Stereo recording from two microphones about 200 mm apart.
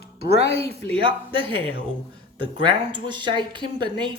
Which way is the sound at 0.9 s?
25° right (ahead or behind).